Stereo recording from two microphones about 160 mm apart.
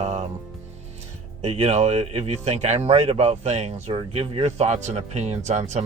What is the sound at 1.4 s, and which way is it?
A man's voice, 40° right (ahead or behind).